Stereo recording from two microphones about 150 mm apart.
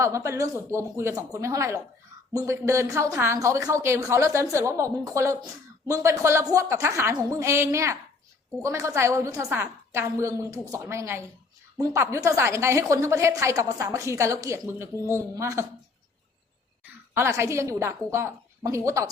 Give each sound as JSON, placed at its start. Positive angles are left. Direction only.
{"t": 0.0, "sound": "a woman's voice", "side_deg": -20}
{"t": 17.2, "sound": "a woman's voice", "side_deg": -20}